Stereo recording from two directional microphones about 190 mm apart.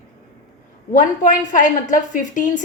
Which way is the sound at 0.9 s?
45° left (ahead or behind).